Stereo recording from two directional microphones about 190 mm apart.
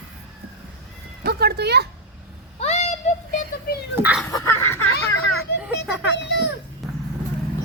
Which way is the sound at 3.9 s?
10° right (ahead or behind).